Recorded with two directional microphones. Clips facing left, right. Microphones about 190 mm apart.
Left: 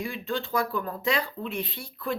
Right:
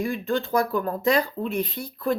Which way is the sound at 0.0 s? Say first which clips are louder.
Right 6 dB; 45° right (ahead or behind).